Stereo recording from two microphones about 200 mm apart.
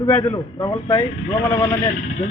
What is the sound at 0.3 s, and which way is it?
Speech, 20° left (ahead or behind).